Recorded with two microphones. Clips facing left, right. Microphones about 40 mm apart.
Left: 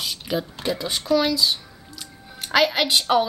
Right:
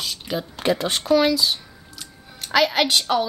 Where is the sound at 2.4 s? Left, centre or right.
Centre.